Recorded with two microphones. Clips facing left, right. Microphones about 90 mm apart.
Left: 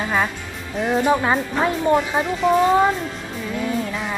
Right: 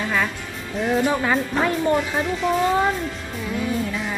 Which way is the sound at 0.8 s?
Centre (ahead or behind).